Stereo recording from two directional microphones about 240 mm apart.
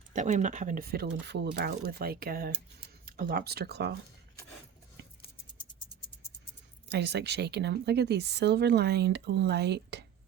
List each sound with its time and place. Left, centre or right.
0.1 s speech: right
6.8 s speech: right